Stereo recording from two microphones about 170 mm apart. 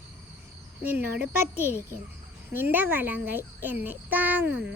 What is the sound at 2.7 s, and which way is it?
A child's voice, 10° right (ahead or behind).